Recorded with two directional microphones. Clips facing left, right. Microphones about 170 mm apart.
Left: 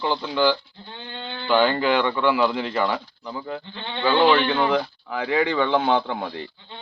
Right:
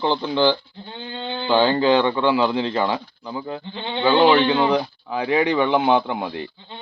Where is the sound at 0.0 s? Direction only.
20° right (ahead or behind).